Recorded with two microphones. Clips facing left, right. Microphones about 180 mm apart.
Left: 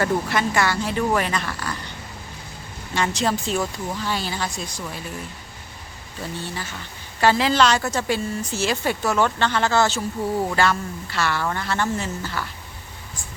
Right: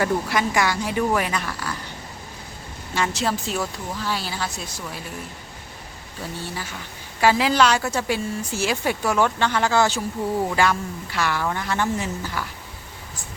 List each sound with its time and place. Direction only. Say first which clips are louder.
0.0 s a woman's voice: even; 10° right (ahead or behind)
2.9 s speech: left 1 dB; 5° right (ahead or behind)
6.4 s a woman's voice: even; 10° right (ahead or behind)